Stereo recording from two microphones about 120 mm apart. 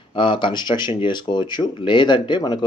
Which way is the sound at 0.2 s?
45° left (ahead or behind).